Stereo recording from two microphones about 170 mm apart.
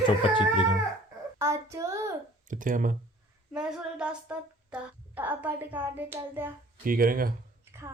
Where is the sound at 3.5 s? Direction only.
5° right (ahead or behind).